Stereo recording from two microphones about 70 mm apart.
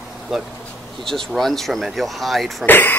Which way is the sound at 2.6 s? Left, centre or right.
Left.